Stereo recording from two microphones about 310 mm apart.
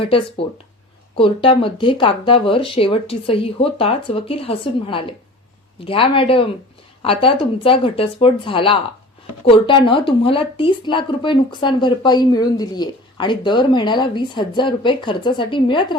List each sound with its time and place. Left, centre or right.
0.0 s speech: centre